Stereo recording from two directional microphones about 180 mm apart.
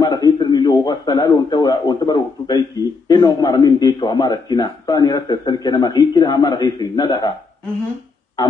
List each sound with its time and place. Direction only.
0.0 s a man's voice: 25° left (ahead or behind)